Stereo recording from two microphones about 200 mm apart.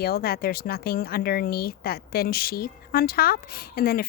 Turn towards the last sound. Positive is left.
turn(degrees=50)  # may be behind; listen again after turning